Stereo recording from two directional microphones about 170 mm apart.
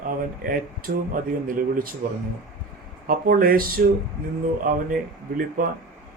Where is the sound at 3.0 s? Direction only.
55° right (ahead or behind).